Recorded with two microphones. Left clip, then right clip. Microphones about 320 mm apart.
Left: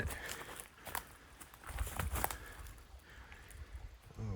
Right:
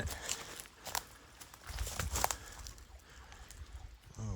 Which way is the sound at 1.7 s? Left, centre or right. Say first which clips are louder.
Right 2 dB; centre.